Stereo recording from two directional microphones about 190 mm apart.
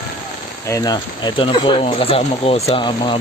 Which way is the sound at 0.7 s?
20° left (ahead or behind).